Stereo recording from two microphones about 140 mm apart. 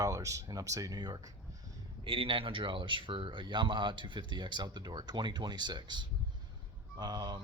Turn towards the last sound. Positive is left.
turn(degrees=-30)  # may be behind; listen again after turning